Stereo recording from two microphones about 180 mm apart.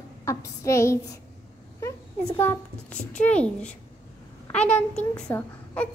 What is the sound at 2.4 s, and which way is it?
A child's voice, 10° left (ahead or behind).